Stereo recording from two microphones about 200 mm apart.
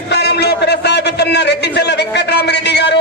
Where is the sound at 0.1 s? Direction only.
55° left (ahead or behind).